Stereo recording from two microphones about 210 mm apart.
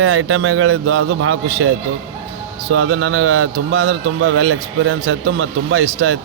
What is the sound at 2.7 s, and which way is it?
A man's voice, 70° right (ahead or behind).